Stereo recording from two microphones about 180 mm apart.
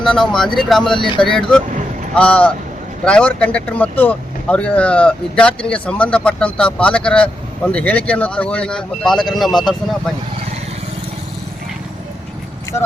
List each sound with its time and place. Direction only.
0.0 s speech: 5° left (ahead or behind)
0.9 s speech: 25° left (ahead or behind)
1.2 s speech: 5° left (ahead or behind)